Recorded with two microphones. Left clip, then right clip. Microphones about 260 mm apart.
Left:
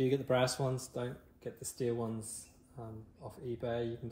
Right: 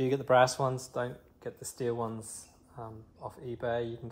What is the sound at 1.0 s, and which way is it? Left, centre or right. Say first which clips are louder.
Speech: right 6 dB; centre.